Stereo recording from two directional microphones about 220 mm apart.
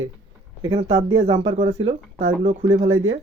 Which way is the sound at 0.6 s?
25° right (ahead or behind).